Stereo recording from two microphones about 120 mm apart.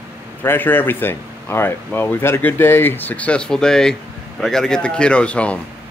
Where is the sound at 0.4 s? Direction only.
15° left (ahead or behind).